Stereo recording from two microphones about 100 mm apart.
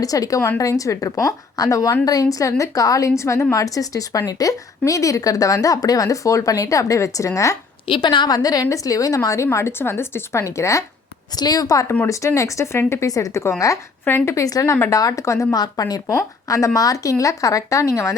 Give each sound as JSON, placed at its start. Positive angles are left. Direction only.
{"t": 0.0, "sound": "a woman's voice", "side_deg": 35}
{"t": 7.9, "sound": "a woman's voice", "side_deg": 55}
{"t": 14.0, "sound": "speech", "side_deg": 15}
{"t": 14.3, "sound": "speech", "side_deg": 35}